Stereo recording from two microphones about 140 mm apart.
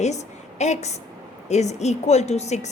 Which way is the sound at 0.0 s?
55° left (ahead or behind).